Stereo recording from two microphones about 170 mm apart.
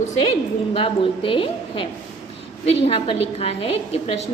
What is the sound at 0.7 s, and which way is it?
A woman's voice, 30° left (ahead or behind).